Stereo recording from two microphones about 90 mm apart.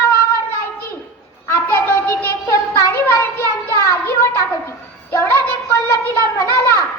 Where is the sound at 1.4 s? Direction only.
25° left (ahead or behind).